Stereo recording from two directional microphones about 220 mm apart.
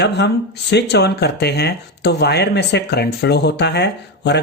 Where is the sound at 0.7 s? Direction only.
50° left (ahead or behind).